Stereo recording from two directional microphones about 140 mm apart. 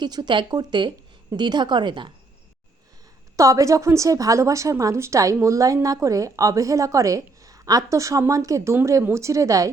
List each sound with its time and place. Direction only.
0.0 s a woman's voice: 30° right (ahead or behind)
3.3 s speech: 25° right (ahead or behind)